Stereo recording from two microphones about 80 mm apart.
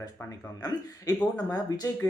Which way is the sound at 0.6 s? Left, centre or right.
Left.